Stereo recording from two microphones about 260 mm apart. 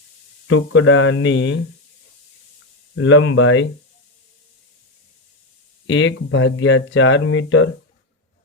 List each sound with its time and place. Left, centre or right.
0.4 s speech: left
2.9 s speech: left
5.9 s speech: left